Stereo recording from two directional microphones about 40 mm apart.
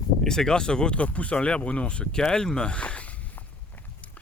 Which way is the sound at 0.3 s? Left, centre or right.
Centre.